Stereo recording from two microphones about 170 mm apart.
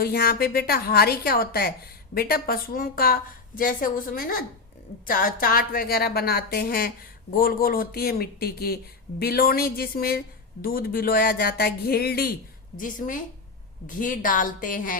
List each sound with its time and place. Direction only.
0.0 s speech: 60° left (ahead or behind)
12.7 s a woman's voice: 50° left (ahead or behind)